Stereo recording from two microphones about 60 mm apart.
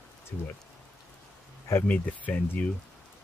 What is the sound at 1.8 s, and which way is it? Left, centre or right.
Speech, left.